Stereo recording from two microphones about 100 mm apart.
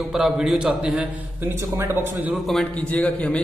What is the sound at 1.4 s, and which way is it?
Speech, 25° right (ahead or behind).